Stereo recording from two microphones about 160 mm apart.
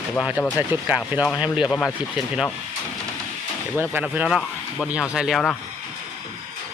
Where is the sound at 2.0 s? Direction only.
5° right (ahead or behind).